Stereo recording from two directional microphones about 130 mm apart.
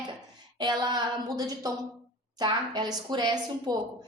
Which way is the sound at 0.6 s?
35° right (ahead or behind).